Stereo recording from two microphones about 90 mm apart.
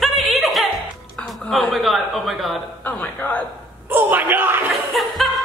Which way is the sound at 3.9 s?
20° right (ahead or behind).